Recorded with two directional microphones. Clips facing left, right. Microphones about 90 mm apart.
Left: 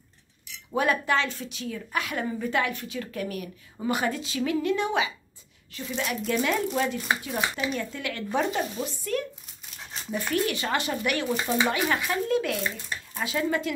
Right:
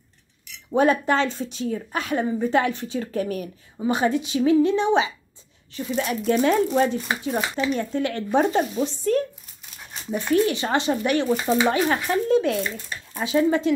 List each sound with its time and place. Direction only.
0.7 s a woman's voice: 30° right (ahead or behind)
3.9 s speech: 25° right (ahead or behind)
5.9 s a woman's voice: 40° right (ahead or behind)